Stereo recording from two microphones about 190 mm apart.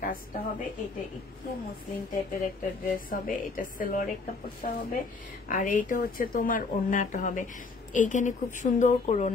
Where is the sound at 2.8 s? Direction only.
45° left (ahead or behind).